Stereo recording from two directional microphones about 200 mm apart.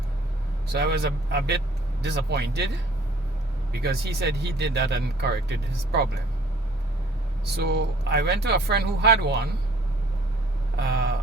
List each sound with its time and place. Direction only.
0.7 s speech: 55° right (ahead or behind)
3.7 s speech: 60° right (ahead or behind)
7.5 s speech: 55° right (ahead or behind)